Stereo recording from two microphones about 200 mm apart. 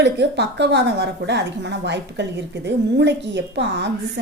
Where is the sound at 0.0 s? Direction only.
60° right (ahead or behind).